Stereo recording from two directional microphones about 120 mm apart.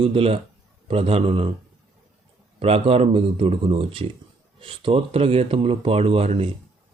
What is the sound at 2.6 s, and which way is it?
Speech, 55° right (ahead or behind).